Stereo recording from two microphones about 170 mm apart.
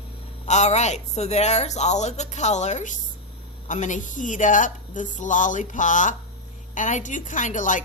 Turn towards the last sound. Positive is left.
turn(degrees=50)  # may be behind; listen again after turning